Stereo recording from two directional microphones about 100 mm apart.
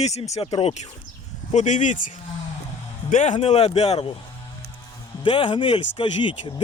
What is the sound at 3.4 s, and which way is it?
Speech, 90° left.